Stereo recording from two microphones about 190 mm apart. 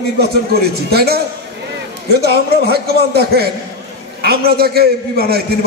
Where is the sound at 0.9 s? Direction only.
55° right (ahead or behind).